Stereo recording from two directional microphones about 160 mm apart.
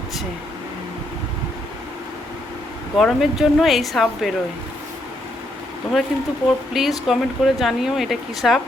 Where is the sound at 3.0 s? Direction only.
Centre (ahead or behind).